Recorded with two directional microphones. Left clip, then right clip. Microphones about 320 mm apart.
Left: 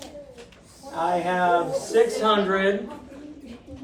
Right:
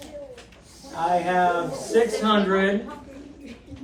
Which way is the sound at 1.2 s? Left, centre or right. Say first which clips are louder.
Even; centre.